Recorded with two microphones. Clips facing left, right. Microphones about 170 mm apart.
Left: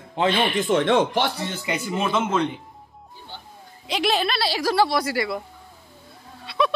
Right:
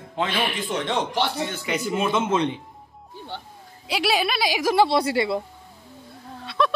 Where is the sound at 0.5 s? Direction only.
55° left (ahead or behind).